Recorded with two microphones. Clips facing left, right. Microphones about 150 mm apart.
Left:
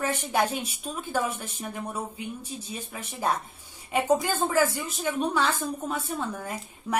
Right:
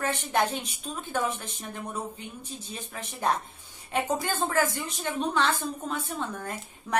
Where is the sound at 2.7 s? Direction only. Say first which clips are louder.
Left 2 dB; 10° left (ahead or behind).